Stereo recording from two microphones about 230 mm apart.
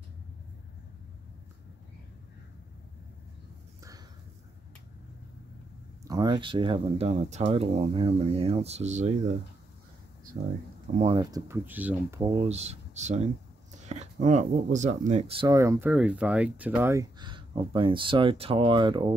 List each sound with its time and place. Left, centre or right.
6.0 s speech: centre
11.0 s speech: right
12.3 s speech: right